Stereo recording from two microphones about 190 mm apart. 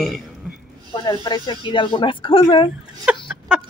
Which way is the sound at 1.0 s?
20° left (ahead or behind).